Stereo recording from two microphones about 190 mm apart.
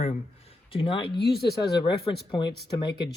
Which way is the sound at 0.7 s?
30° left (ahead or behind).